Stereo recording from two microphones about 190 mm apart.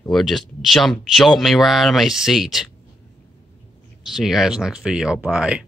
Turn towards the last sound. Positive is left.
turn(degrees=-5)  # may be behind; listen again after turning